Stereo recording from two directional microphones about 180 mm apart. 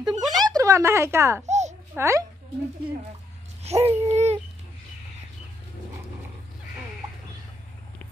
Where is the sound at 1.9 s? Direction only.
15° right (ahead or behind).